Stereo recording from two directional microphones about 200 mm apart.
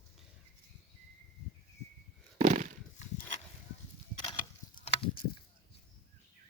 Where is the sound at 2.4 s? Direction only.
35° right (ahead or behind).